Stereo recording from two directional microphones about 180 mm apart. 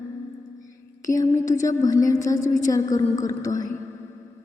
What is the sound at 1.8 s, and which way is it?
A man's voice, 20° left (ahead or behind).